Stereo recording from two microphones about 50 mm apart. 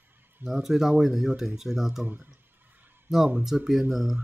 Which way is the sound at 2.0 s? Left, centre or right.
Right.